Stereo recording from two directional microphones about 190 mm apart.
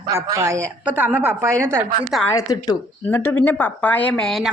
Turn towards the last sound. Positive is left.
turn(degrees=5)  # may be behind; listen again after turning